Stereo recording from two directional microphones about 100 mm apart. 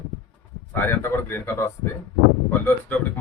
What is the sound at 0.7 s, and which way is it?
Speech, 20° left (ahead or behind).